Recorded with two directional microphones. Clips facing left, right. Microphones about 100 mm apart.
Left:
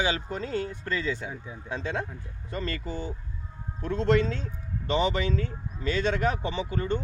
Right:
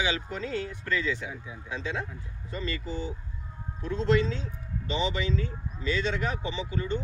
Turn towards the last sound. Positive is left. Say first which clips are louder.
# left 2 dB
turn(degrees=45)  # may be behind; listen again after turning